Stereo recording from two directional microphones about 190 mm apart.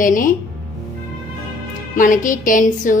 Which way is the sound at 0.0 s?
45° left (ahead or behind).